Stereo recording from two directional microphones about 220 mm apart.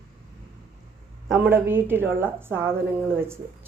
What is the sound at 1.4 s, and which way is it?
A man's voice, 10° right (ahead or behind).